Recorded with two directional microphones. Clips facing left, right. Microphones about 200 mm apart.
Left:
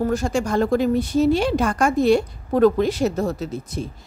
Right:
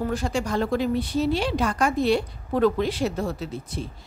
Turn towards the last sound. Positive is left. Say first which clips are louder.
# left 4 dB
turn(degrees=45)  # may be behind; listen again after turning